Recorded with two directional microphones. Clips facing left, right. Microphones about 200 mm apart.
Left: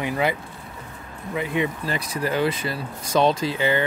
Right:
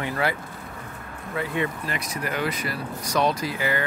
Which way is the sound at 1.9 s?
30° left (ahead or behind).